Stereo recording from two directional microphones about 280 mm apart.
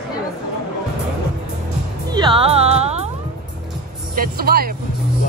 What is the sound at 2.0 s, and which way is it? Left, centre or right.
Speech, centre.